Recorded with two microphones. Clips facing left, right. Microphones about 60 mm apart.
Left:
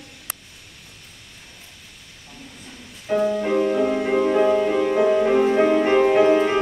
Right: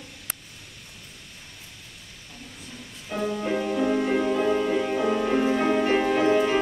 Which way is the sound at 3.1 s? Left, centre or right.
Left.